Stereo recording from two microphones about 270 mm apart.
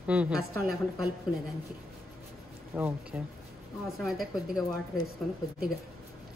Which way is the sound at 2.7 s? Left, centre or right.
Centre.